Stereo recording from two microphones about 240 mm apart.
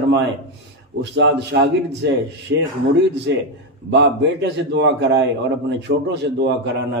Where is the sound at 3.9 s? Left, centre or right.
Right.